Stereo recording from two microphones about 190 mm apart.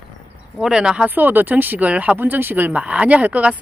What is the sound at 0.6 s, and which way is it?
Speech, 5° right (ahead or behind).